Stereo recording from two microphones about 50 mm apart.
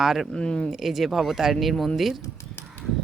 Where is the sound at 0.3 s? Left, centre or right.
Centre.